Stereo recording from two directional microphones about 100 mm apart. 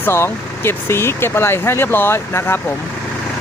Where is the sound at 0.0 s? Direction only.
25° left (ahead or behind).